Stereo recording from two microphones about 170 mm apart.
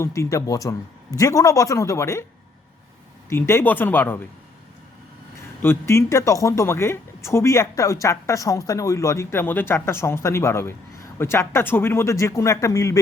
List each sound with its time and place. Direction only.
0.0 s a man's voice: 20° left (ahead or behind)
3.2 s speech: 15° left (ahead or behind)
5.6 s speech: 15° left (ahead or behind)